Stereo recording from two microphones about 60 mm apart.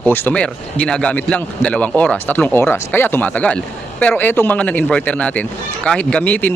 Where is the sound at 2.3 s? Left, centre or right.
Left.